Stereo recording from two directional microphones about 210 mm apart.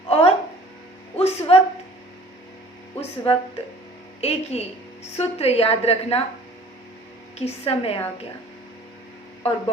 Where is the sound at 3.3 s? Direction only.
25° left (ahead or behind).